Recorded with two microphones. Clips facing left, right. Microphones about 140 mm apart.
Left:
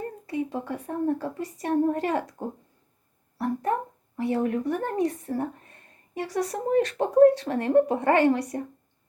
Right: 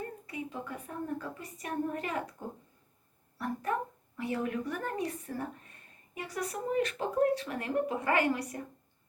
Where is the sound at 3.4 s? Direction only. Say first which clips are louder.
Left 7 dB; 25° left (ahead or behind).